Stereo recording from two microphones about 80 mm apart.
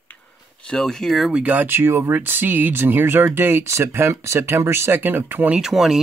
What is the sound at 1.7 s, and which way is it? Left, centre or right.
Speech, right.